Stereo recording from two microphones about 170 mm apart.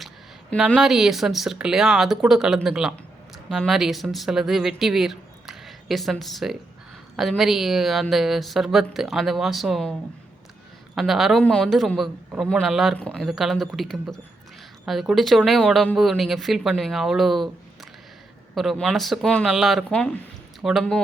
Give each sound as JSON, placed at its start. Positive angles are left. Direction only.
{"t": 0.5, "sound": "a woman's voice", "side_deg": 0}
{"t": 10.9, "sound": "a woman's voice", "side_deg": 0}
{"t": 18.5, "sound": "a woman's voice", "side_deg": 0}